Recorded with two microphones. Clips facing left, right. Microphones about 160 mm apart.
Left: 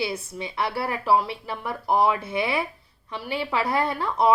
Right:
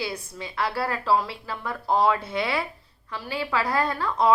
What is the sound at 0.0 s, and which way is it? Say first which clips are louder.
A woman's voice: left 3 dB; 20° left (ahead or behind).